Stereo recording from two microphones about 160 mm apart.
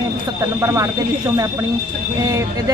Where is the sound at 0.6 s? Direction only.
20° right (ahead or behind).